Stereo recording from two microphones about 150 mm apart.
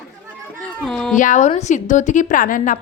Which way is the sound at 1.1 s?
55° left (ahead or behind).